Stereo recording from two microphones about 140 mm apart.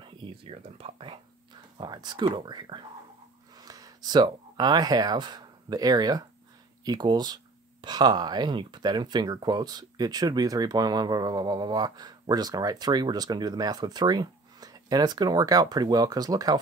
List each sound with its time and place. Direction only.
0.0 s speech: 35° right (ahead or behind)